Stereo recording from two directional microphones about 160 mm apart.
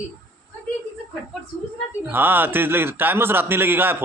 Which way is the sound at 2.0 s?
10° right (ahead or behind).